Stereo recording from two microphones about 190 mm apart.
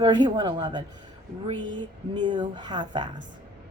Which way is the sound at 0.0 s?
25° right (ahead or behind).